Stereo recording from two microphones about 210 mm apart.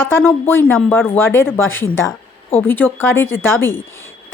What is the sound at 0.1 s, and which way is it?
A woman's voice, 10° left (ahead or behind).